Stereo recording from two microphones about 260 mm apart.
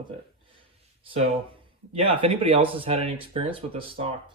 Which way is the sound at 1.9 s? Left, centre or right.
Right.